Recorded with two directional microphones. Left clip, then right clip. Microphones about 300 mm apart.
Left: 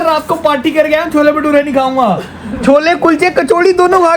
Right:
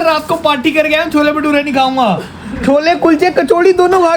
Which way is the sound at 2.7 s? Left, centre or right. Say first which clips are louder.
Left 1 dB; left.